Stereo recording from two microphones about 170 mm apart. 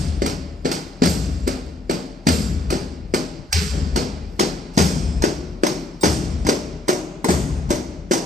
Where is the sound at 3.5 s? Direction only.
45° right (ahead or behind).